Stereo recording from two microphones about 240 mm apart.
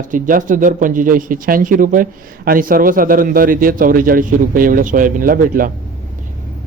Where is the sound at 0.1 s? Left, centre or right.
Right.